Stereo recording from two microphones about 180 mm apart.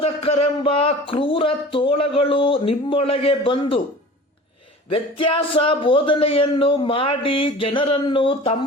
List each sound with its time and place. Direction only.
0.0 s speech: 35° left (ahead or behind)
4.9 s speech: 30° left (ahead or behind)